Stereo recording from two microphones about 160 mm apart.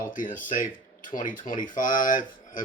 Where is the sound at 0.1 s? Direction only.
55° left (ahead or behind).